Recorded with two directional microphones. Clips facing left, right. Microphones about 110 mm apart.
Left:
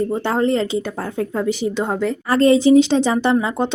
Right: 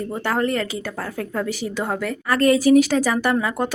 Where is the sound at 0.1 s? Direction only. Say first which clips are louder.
Left 4 dB; 25° left (ahead or behind).